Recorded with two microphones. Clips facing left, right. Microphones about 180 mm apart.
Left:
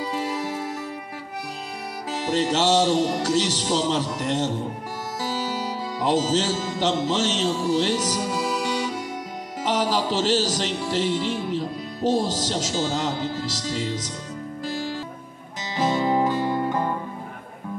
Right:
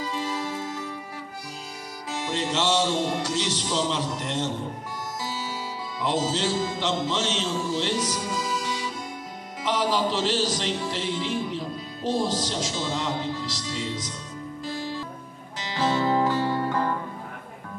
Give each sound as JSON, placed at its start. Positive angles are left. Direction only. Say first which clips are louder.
{"t": 2.2, "sound": "music", "louder": "left 5 dB", "side_deg": 40}
{"t": 6.0, "sound": "music", "louder": "left 4 dB", "side_deg": 40}
{"t": 8.3, "sound": "music", "louder": "left 4 dB", "side_deg": 70}
{"t": 9.6, "sound": "speech", "louder": "left 1 dB", "side_deg": 40}
{"t": 12.0, "sound": "music", "louder": "left 3 dB", "side_deg": 40}
{"t": 15.7, "sound": "music", "louder": "left 2 dB", "side_deg": 15}